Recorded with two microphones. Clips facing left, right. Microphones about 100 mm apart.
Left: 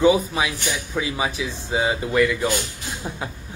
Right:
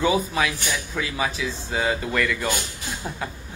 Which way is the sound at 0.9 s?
15° left (ahead or behind).